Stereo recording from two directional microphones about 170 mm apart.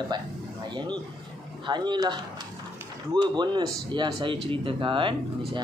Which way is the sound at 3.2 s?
25° right (ahead or behind).